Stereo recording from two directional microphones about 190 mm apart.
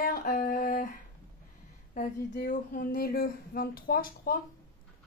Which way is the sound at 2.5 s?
45° left (ahead or behind).